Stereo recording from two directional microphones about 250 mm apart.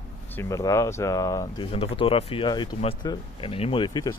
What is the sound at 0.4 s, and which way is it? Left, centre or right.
Speech, centre.